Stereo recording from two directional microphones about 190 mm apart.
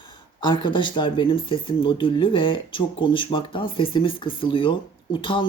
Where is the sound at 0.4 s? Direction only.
25° left (ahead or behind).